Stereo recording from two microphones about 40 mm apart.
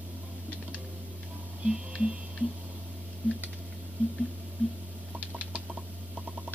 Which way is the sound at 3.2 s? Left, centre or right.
Right.